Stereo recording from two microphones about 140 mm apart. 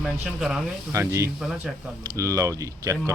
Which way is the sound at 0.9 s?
20° right (ahead or behind).